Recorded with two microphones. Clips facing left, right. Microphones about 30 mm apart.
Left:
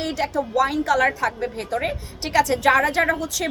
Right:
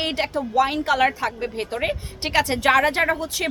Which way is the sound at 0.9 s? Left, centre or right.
Right.